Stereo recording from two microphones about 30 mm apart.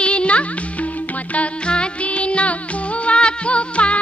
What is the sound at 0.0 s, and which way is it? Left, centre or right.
Music, left.